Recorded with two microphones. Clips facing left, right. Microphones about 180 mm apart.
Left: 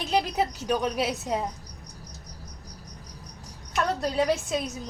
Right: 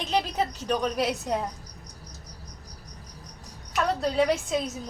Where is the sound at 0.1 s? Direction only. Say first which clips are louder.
Left 1 dB; 5° left (ahead or behind).